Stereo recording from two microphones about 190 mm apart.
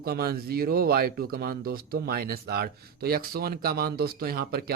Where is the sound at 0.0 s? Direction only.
55° right (ahead or behind).